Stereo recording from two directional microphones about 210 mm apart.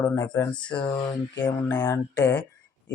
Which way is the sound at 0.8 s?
20° left (ahead or behind).